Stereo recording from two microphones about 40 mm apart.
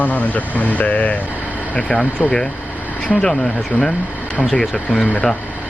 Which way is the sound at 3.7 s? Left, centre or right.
Left.